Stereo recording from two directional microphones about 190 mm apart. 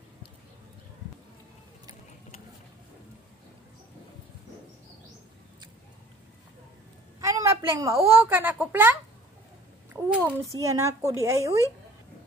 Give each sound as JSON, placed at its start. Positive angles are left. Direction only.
{"t": 7.2, "sound": "a woman's voice", "side_deg": -15}
{"t": 10.0, "sound": "a child's voice", "side_deg": -5}
{"t": 10.6, "sound": "speech", "side_deg": -15}